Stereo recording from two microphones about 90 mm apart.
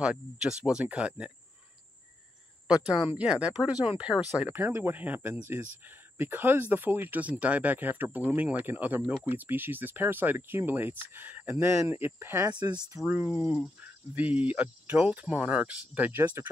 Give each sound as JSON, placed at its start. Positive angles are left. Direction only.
{"t": 0.0, "sound": "speech", "side_deg": -10}
{"t": 3.2, "sound": "speech", "side_deg": -15}
{"t": 4.5, "sound": "speech", "side_deg": -25}
{"t": 12.4, "sound": "speech", "side_deg": -50}
{"t": 13.0, "sound": "speech", "side_deg": -20}
{"t": 13.4, "sound": "speech", "side_deg": -10}